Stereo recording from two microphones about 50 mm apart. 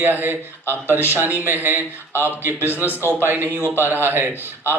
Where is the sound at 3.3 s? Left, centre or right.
Right.